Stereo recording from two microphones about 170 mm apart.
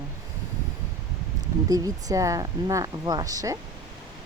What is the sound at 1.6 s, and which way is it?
Speech, 20° right (ahead or behind).